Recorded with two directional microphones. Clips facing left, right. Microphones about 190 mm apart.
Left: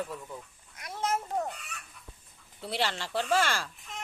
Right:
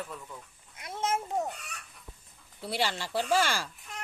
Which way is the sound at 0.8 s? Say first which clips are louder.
Even; 25° right (ahead or behind).